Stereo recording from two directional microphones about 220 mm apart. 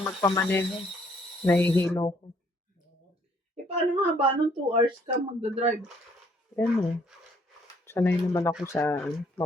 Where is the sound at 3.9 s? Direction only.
25° right (ahead or behind).